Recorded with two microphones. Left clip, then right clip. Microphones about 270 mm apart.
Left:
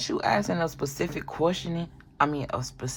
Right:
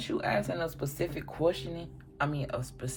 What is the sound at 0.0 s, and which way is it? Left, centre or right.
Speech, left.